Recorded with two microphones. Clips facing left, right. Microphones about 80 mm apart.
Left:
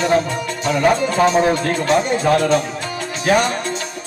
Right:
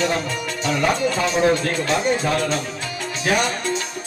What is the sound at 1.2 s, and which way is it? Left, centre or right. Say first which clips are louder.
Speech: left 5 dB; left.